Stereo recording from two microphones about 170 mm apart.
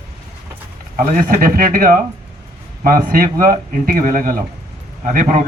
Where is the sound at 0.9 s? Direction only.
55° right (ahead or behind).